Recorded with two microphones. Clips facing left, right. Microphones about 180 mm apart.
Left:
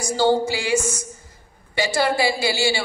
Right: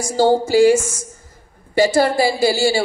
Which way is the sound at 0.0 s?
40° right (ahead or behind).